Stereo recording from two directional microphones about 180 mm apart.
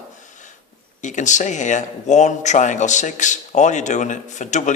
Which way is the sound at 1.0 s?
45° left (ahead or behind).